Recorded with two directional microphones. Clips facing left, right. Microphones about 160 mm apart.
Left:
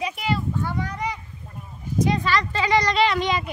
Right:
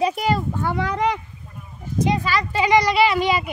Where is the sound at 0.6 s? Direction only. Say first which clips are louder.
Right 5 dB; 85° right.